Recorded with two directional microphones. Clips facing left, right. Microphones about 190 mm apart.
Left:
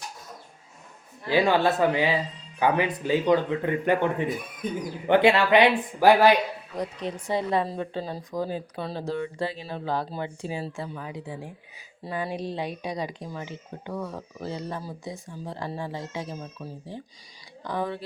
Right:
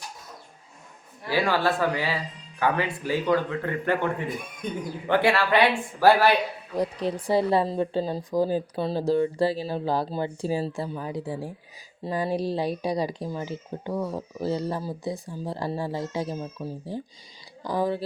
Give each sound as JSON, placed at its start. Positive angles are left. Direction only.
{"t": 1.3, "sound": "a man's voice", "side_deg": 20}
{"t": 4.6, "sound": "speech", "side_deg": 5}
{"t": 5.0, "sound": "a man's voice", "side_deg": 20}
{"t": 6.7, "sound": "speech", "side_deg": -35}